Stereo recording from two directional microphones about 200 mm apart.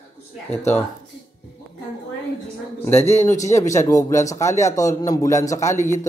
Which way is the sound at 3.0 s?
30° left (ahead or behind).